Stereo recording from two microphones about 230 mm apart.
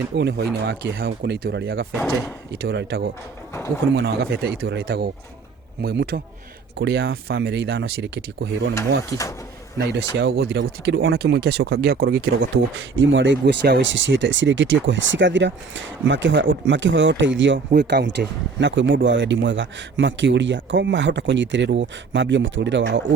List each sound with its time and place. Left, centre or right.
0.2 s speech: right
1.9 s speech: centre
2.5 s speech: right
10.2 s speech: right